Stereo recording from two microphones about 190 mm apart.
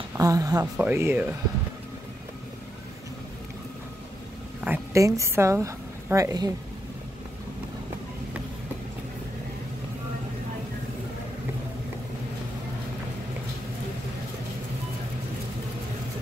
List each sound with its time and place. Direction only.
0.2 s speech: 20° right (ahead or behind)
4.6 s a woman's voice: 10° right (ahead or behind)